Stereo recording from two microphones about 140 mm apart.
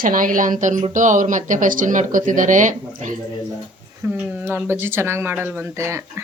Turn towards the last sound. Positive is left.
turn(degrees=-20)  # may be behind; listen again after turning